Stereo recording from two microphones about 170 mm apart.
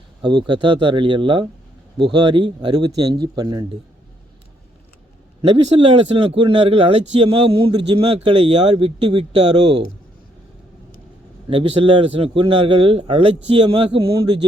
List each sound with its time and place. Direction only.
0.2 s a man's voice: 25° right (ahead or behind)
5.4 s a man's voice: 35° right (ahead or behind)
11.4 s a man's voice: 30° right (ahead or behind)